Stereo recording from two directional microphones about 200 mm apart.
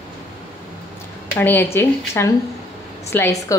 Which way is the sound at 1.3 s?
10° left (ahead or behind).